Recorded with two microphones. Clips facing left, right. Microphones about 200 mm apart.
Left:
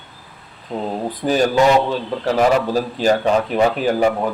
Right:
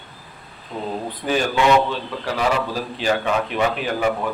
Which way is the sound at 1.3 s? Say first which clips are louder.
Left 3 dB; 40° left (ahead or behind).